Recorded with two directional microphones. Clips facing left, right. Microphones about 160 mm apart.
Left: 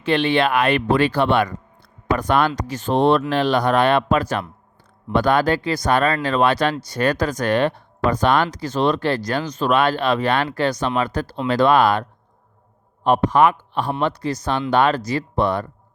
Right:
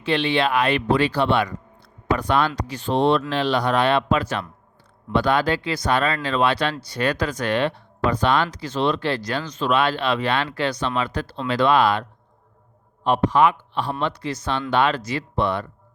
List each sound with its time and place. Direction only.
0.0 s speech: 50° left (ahead or behind)
13.1 s speech: 50° left (ahead or behind)